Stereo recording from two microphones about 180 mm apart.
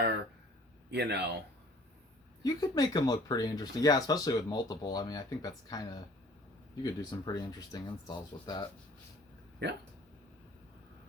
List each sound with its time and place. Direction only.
0.9 s speech: 70° right (ahead or behind)
2.4 s speech: 20° left (ahead or behind)